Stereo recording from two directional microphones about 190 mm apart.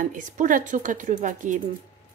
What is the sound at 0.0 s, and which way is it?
Speech, 45° right (ahead or behind).